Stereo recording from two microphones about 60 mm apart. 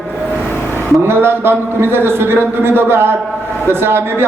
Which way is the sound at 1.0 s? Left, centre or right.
Right.